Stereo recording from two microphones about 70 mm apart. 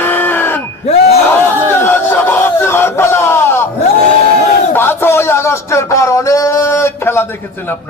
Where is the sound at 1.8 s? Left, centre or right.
Left.